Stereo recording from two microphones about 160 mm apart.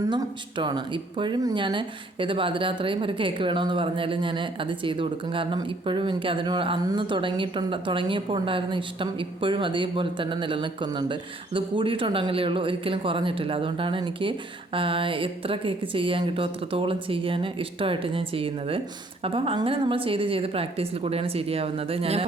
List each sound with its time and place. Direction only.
0.0 s speech: 25° right (ahead or behind)